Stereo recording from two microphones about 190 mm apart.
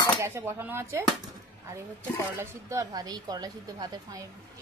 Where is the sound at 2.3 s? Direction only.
20° right (ahead or behind).